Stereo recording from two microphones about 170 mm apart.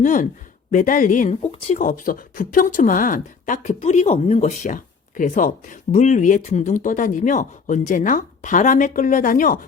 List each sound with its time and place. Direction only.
0.0 s speech: 50° left (ahead or behind)